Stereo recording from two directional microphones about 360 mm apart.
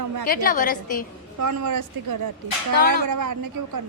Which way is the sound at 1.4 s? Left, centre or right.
Right.